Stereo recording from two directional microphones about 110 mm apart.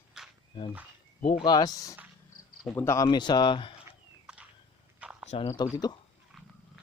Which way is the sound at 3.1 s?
40° left (ahead or behind).